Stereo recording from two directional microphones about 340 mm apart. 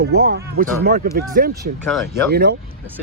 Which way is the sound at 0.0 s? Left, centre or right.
Right.